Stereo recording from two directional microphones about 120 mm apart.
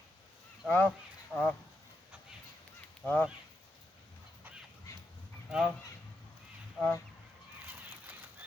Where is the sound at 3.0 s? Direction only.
15° left (ahead or behind).